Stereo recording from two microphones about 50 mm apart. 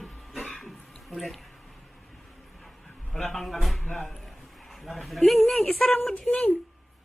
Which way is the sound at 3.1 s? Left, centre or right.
Centre.